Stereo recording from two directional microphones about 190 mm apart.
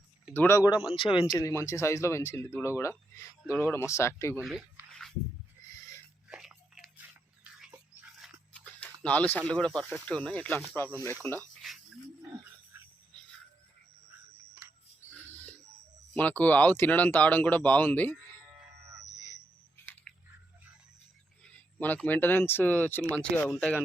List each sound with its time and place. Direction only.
0.3 s speech: 15° left (ahead or behind)
0.9 s speech: 25° left (ahead or behind)
1.4 s speech: 15° left (ahead or behind)
3.4 s speech: 5° right (ahead or behind)
3.7 s speech: 15° left (ahead or behind)
4.4 s a sound: 5° right (ahead or behind)
6.2 s biting: 5° right (ahead or behind)
8.2 s a sound: 5° left (ahead or behind)
9.0 s speech: 10° left (ahead or behind)
15.1 s a sound: 10° left (ahead or behind)
16.1 s speech: 10° left (ahead or behind)
19.7 s a sound: 10° left (ahead or behind)
21.8 s speech: 10° left (ahead or behind)